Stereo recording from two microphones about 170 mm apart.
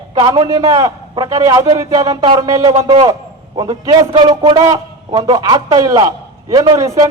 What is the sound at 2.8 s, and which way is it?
A man's voice, 30° right (ahead or behind).